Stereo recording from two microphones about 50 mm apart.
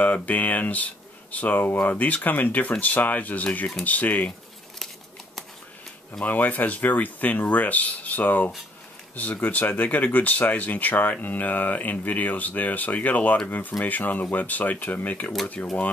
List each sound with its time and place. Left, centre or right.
0.0 s speech: left
6.2 s speech: left